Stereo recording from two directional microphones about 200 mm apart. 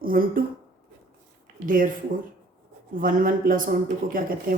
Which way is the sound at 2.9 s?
45° right (ahead or behind).